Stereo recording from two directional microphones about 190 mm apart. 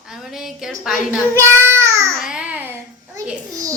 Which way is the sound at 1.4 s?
15° right (ahead or behind).